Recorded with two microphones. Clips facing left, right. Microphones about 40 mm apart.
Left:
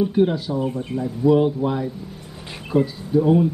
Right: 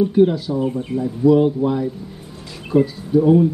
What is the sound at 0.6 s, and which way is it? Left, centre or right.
Speech, centre.